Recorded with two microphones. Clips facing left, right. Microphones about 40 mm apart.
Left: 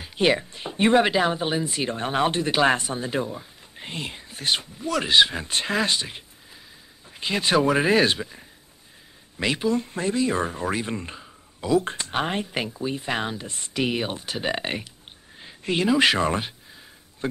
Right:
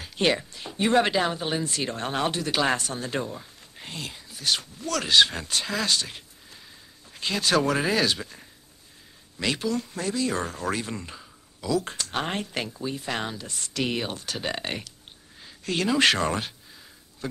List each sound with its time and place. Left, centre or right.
0.0 s a sound: centre
0.4 s speech: left
0.9 s a man's voice: centre
3.8 s speech: left
4.6 s speech: centre
5.5 s speech: left
8.2 s speech: centre
15.3 s a sound: left
15.9 s speech: centre
17.2 s speech: left